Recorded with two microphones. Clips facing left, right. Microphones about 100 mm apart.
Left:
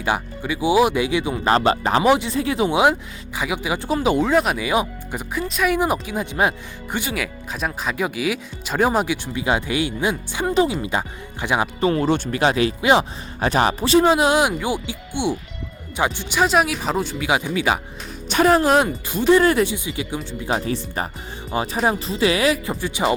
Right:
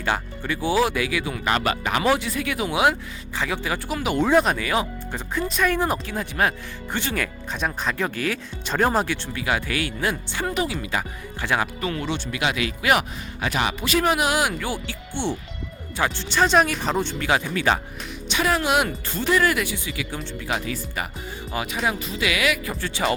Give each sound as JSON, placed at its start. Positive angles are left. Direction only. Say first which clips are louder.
{"t": 0.0, "sound": "speech", "louder": "left 3 dB", "side_deg": 15}
{"t": 2.0, "sound": "speech", "louder": "left 3 dB", "side_deg": 20}
{"t": 3.8, "sound": "speech", "louder": "left 8 dB", "side_deg": 25}
{"t": 4.2, "sound": "speech", "louder": "even", "side_deg": 0}
{"t": 4.5, "sound": "speech", "louder": "left 3 dB", "side_deg": 15}
{"t": 5.4, "sound": "speech", "louder": "left 2 dB", "side_deg": 5}
{"t": 11.9, "sound": "speech", "louder": "left 8 dB", "side_deg": 35}
{"t": 12.1, "sound": "speech", "louder": "left 6 dB", "side_deg": 45}
{"t": 13.4, "sound": "speech", "louder": "left 6 dB", "side_deg": 35}
{"t": 18.3, "sound": "speech", "louder": "left 7 dB", "side_deg": 45}
{"t": 18.9, "sound": "speech", "louder": "left 4 dB", "side_deg": 15}
{"t": 19.3, "sound": "speech", "louder": "left 6 dB", "side_deg": 30}
{"t": 20.4, "sound": "speech", "louder": "left 5 dB", "side_deg": 35}